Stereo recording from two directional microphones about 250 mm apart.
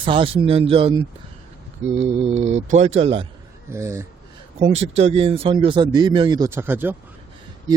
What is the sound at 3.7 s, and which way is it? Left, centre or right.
Speech, centre.